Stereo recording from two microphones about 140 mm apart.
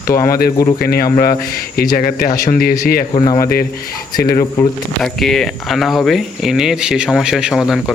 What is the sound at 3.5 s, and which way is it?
Speech, 90° left.